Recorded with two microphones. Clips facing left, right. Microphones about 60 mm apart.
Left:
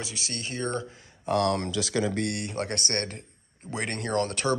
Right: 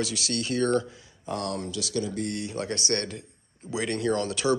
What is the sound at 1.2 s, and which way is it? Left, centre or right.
Speech, left.